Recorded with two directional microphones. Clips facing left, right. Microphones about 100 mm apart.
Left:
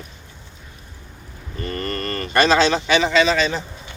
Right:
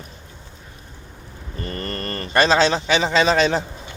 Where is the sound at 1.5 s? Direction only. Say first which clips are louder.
Left 2 dB; 30° right (ahead or behind).